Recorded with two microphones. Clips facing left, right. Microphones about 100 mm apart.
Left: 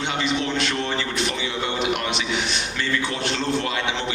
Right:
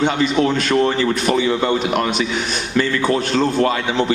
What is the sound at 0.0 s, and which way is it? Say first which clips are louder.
A man's voice: right 8 dB; 45° right (ahead or behind).